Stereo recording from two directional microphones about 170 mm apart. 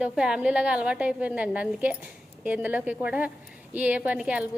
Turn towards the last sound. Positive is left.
turn(degrees=-5)  # may be behind; listen again after turning